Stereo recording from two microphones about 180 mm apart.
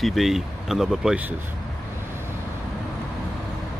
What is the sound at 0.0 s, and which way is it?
Speech, centre (ahead or behind).